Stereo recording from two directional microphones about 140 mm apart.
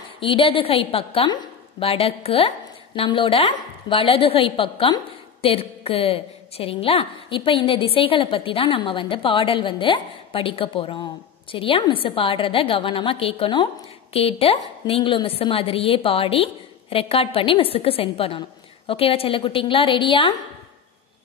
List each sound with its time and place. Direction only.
0.2 s a woman's voice: 40° left (ahead or behind)
1.3 s a sound: 30° left (ahead or behind)
1.9 s a woman's voice: 45° left (ahead or behind)